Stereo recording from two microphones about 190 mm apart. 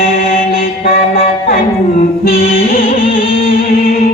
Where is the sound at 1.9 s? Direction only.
50° left (ahead or behind).